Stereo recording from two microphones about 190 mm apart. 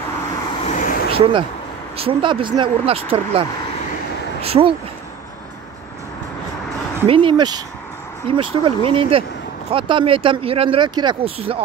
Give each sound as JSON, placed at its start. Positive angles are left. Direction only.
{"t": 0.7, "sound": "vehicle", "side_deg": 40}
{"t": 1.1, "sound": "speech", "side_deg": -30}
{"t": 7.1, "sound": "speech", "side_deg": -25}